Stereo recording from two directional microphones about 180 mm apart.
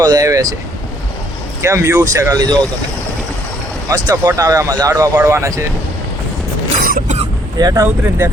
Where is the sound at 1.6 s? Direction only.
15° right (ahead or behind).